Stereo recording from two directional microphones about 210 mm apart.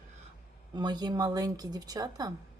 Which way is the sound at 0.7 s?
20° right (ahead or behind).